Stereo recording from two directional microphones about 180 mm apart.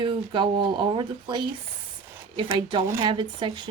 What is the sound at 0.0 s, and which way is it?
Speech, 25° right (ahead or behind).